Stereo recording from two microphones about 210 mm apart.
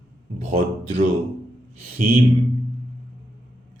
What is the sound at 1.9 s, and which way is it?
Speech, 45° right (ahead or behind).